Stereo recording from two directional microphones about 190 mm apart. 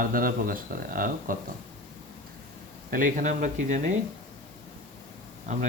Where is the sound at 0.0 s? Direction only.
50° right (ahead or behind).